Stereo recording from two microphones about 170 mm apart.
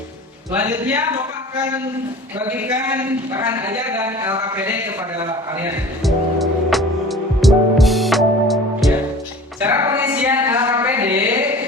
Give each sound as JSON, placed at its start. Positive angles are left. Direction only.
{"t": 0.5, "sound": "speech", "side_deg": -10}
{"t": 2.5, "sound": "speech", "side_deg": -10}
{"t": 6.1, "sound": "music", "side_deg": 0}
{"t": 9.6, "sound": "music", "side_deg": -10}
{"t": 9.8, "sound": "a sound", "side_deg": -20}